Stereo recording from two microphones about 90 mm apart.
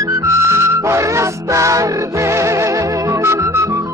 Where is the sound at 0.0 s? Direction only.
35° right (ahead or behind).